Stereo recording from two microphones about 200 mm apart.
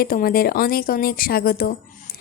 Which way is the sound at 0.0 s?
45° left (ahead or behind).